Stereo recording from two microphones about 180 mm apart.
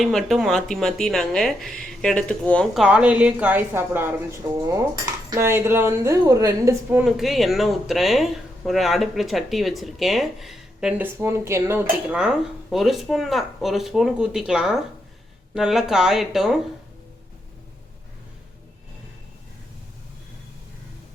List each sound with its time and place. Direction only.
0.0 s speech: centre (ahead or behind)
2.8 s a woman's voice: 5° right (ahead or behind)
7.0 s speech: centre (ahead or behind)